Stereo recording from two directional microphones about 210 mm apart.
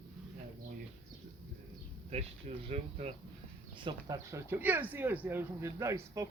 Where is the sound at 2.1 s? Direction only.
30° right (ahead or behind).